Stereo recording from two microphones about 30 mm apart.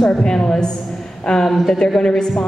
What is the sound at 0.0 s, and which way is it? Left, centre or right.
A woman's voice, left.